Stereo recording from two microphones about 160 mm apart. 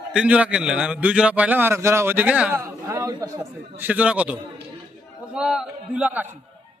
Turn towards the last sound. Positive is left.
turn(degrees=-10)  # may be behind; listen again after turning